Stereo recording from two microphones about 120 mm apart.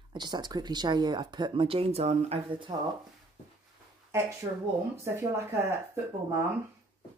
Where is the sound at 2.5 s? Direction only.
45° right (ahead or behind).